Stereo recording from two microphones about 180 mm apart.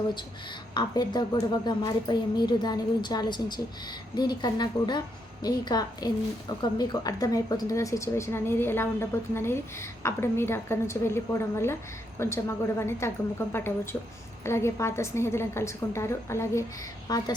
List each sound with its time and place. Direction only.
0.7 s a woman's voice: 25° left (ahead or behind)